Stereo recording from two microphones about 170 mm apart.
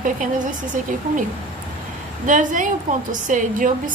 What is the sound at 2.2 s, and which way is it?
A woman's voice, 50° right (ahead or behind).